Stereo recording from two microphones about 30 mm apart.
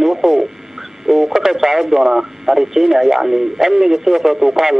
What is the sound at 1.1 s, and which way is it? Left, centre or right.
Speech, centre.